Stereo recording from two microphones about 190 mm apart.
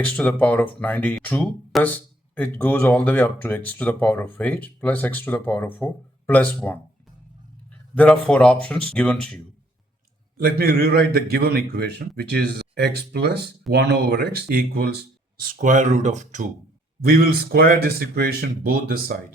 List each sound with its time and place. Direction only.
0.0 s speech: 5° left (ahead or behind)
7.9 s speech: 5° left (ahead or behind)
10.3 s a man's voice: 50° right (ahead or behind)
17.1 s speech: 50° right (ahead or behind)